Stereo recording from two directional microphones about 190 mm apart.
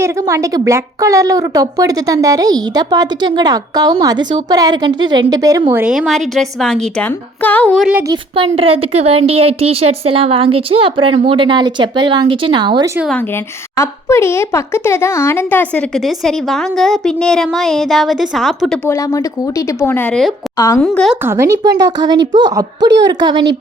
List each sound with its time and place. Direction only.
0.0 s speech: 15° right (ahead or behind)
5.8 s a woman's voice: centre (ahead or behind)
8.0 s speech: 25° right (ahead or behind)
13.1 s a woman's voice: 15° left (ahead or behind)
18.9 s speech: 15° left (ahead or behind)
20.6 s speech: 15° left (ahead or behind)
20.8 s a woman's voice: centre (ahead or behind)
21.2 s speech: 15° right (ahead or behind)